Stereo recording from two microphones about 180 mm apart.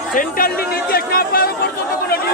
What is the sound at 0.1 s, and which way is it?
Chatter, 50° left (ahead or behind).